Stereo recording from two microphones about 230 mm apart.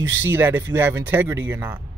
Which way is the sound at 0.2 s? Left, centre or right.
Centre.